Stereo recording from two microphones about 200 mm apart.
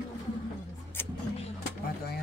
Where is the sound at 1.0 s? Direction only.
10° left (ahead or behind).